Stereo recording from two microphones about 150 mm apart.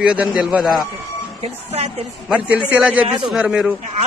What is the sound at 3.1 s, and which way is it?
Speech, 30° right (ahead or behind).